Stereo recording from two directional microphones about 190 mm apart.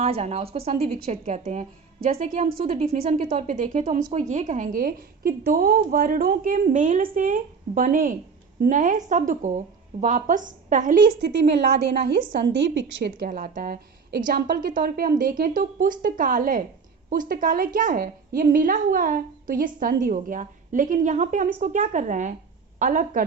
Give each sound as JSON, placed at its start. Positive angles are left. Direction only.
{"t": 0.0, "sound": "a woman's voice", "side_deg": -35}
{"t": 2.7, "sound": "a woman's voice", "side_deg": -30}
{"t": 3.0, "sound": "a woman's voice", "side_deg": -45}
{"t": 3.2, "sound": "a woman's voice", "side_deg": -35}
{"t": 11.3, "sound": "a woman's voice", "side_deg": -65}
{"t": 13.1, "sound": "a woman's voice", "side_deg": -50}